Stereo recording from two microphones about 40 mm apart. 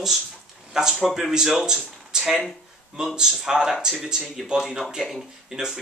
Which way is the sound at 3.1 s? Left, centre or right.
Centre.